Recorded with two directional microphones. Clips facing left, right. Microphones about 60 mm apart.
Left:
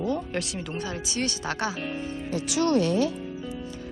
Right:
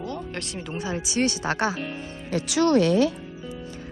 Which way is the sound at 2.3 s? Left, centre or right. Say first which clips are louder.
Right 4 dB; right.